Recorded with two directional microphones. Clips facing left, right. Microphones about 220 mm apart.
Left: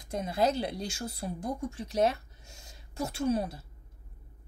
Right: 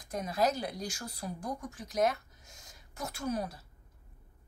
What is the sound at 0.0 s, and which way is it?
Speech, 25° left (ahead or behind).